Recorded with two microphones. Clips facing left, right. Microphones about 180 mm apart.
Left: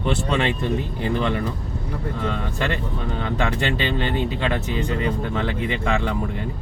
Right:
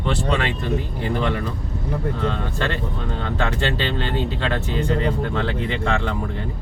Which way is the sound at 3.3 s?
15° left (ahead or behind).